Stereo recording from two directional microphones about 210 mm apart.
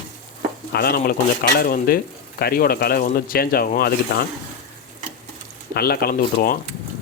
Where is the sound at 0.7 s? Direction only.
45° left (ahead or behind).